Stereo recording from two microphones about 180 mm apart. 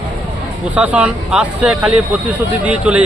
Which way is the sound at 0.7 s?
5° right (ahead or behind).